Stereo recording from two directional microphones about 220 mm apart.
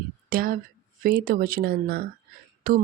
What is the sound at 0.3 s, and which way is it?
Speech, 40° right (ahead or behind).